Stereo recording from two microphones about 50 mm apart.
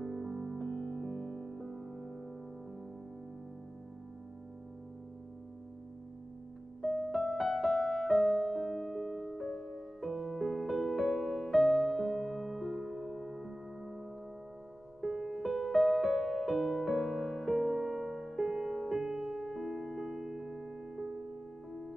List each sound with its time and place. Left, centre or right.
0.0 s music: centre
6.8 s music: centre
20.4 s music: centre